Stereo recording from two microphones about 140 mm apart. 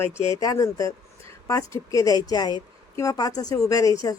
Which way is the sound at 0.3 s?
25° left (ahead or behind).